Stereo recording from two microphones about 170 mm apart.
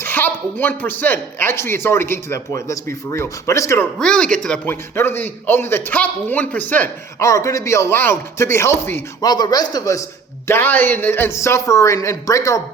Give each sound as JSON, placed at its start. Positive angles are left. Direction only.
{"t": 0.0, "sound": "a man's voice", "side_deg": 10}
{"t": 3.9, "sound": "a man's voice", "side_deg": 5}